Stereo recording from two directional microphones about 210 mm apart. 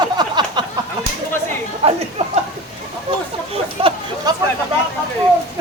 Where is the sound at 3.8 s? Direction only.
30° right (ahead or behind).